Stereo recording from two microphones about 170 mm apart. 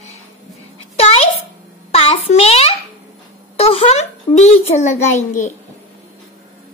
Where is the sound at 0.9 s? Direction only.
35° left (ahead or behind).